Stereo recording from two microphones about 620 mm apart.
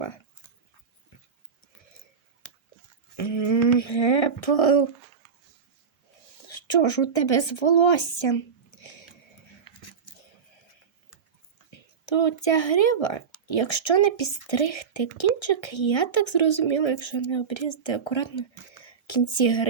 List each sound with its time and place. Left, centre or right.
3.2 s speech: left
4.4 s speech: left
6.5 s a woman's voice: left
11.7 s speech: left